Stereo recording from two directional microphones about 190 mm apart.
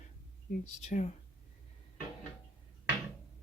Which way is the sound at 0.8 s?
40° left (ahead or behind).